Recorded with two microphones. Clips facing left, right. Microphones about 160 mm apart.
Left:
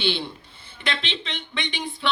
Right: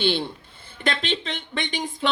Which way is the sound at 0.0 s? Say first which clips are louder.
Right 3 dB; 50° right (ahead or behind).